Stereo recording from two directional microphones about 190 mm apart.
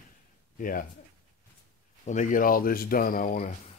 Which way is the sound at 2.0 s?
40° left (ahead or behind).